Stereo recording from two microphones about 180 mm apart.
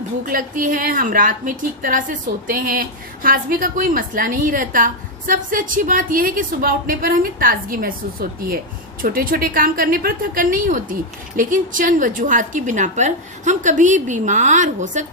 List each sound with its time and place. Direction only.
0.3 s a woman's voice: 50° right (ahead or behind)